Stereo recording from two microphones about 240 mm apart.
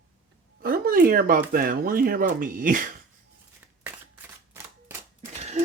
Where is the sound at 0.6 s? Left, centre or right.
Right.